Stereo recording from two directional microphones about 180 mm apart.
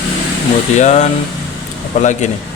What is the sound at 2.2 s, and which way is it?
Speech, 40° left (ahead or behind).